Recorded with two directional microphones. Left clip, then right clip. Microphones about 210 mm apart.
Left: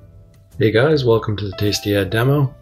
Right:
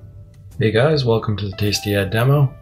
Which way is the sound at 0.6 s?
45° left (ahead or behind).